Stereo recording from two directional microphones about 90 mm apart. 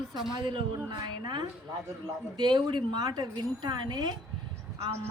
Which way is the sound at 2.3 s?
60° right (ahead or behind).